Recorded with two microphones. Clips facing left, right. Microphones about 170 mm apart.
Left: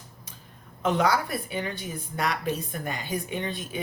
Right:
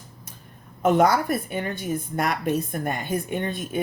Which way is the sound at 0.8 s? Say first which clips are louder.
Right 5 dB; 50° right (ahead or behind).